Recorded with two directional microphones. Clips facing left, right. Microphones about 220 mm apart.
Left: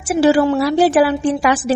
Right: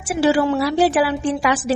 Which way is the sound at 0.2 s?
45° left (ahead or behind).